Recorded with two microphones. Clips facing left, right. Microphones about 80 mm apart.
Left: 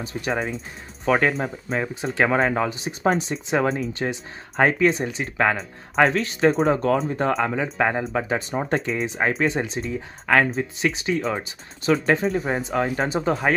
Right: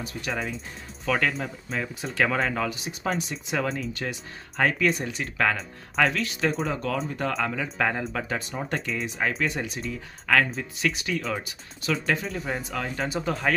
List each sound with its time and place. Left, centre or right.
0.0 s speech: left
5.9 s speech: left